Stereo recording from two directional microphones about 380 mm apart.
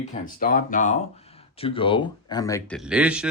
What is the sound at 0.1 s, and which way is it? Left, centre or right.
Speech, left.